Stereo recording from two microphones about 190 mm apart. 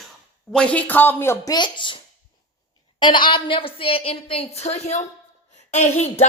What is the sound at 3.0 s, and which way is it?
A woman's voice, 25° left (ahead or behind).